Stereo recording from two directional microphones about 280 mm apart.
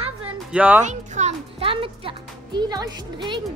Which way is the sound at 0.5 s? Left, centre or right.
Centre.